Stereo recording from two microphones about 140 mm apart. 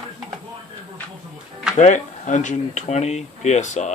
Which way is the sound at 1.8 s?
60° left (ahead or behind).